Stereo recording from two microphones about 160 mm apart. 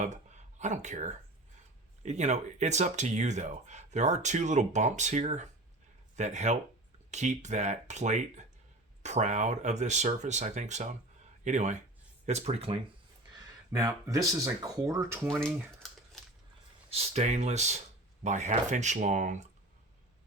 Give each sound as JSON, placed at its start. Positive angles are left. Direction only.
{"t": 0.6, "sound": "speech", "side_deg": -50}
{"t": 13.7, "sound": "speech", "side_deg": -20}
{"t": 15.3, "sound": "a sound", "side_deg": 5}
{"t": 16.9, "sound": "speech", "side_deg": -40}